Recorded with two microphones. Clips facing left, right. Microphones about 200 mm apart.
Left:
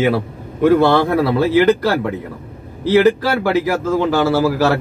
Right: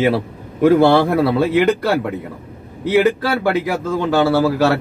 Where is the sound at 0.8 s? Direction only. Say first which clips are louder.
Right 1 dB; 10° right (ahead or behind).